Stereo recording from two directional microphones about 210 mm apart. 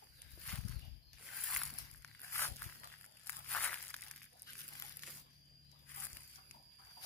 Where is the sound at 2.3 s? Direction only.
10° left (ahead or behind).